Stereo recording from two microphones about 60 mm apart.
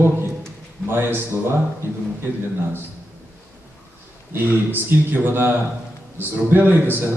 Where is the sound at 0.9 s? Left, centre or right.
Right.